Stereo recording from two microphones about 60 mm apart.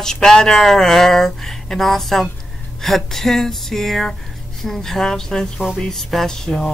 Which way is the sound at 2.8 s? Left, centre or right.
Centre.